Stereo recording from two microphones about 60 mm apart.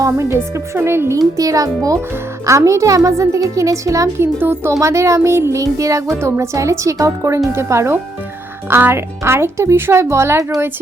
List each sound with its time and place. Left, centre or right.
0.0 s speech: right
1.4 s a child's voice: right
2.5 s a child's voice: right
4.2 s a child's voice: right
4.8 s a child's voice: right
6.2 s speech: right